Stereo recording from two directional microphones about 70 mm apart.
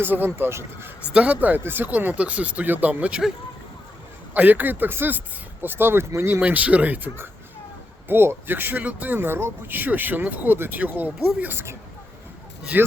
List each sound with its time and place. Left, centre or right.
0.0 s a man's voice: right
1.1 s a man's voice: centre
4.4 s a man's voice: right
6.4 s a man's voice: right
12.7 s a man's voice: right